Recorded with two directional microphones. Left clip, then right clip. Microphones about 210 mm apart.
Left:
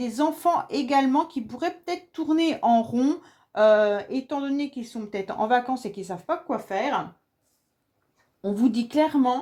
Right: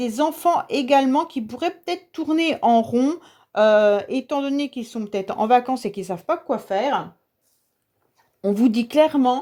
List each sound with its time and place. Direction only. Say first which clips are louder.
0.0 s speech: right 3 dB; 45° right (ahead or behind)
8.4 s speech: right 5 dB; 45° right (ahead or behind)